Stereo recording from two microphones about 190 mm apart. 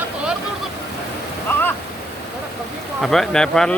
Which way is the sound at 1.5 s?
10° left (ahead or behind).